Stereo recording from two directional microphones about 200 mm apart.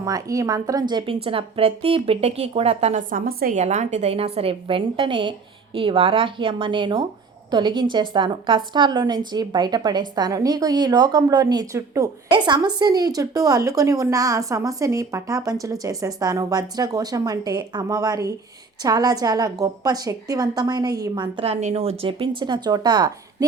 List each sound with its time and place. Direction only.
0.0 s a woman's voice: 15° right (ahead or behind); by 3.6 s 45° right (ahead or behind)
3.6 s a woman's voice: 35° right (ahead or behind); by 23.5 s 20° right (ahead or behind)